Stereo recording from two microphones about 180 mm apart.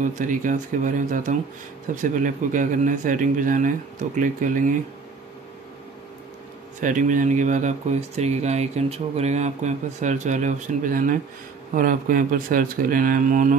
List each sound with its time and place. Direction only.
0.0 s speech: 45° right (ahead or behind)
6.8 s speech: 45° right (ahead or behind)